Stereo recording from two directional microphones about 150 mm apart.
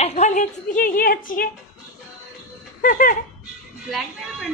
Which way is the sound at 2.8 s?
65° left (ahead or behind).